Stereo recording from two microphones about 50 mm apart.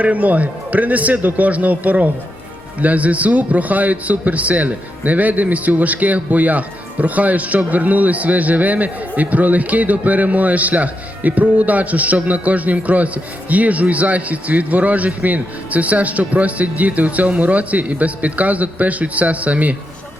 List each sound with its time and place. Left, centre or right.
0.0 s a man's voice: right